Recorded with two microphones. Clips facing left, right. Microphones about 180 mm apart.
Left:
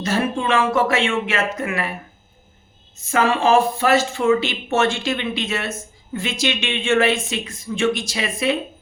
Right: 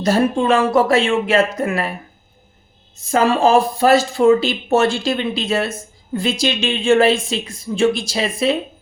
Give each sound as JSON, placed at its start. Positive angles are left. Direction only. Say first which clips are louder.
{"t": 0.0, "sound": "speech", "louder": "right 5 dB", "side_deg": -35}
{"t": 3.0, "sound": "speech", "louder": "right 4 dB", "side_deg": -35}